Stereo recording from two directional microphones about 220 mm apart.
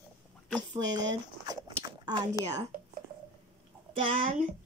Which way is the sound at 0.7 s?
20° right (ahead or behind).